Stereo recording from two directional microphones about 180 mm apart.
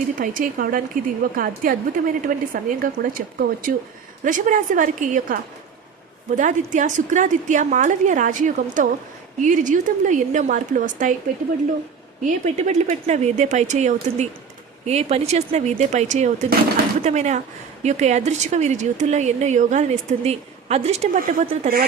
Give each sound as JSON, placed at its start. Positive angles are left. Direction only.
{"t": 0.2, "sound": "a woman's voice", "side_deg": -50}
{"t": 12.2, "sound": "a woman's voice", "side_deg": -40}